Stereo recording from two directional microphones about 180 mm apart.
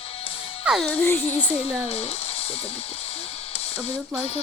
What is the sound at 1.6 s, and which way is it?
Music, 35° left (ahead or behind).